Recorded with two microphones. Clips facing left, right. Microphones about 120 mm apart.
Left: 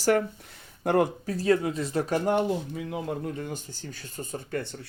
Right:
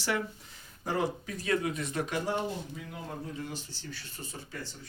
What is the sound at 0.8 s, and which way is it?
Speech, 60° left (ahead or behind).